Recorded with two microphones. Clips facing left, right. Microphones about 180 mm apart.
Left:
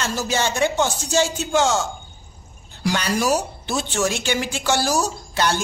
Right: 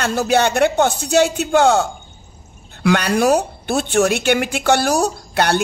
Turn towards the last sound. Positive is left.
turn(degrees=-60)  # may be behind; listen again after turning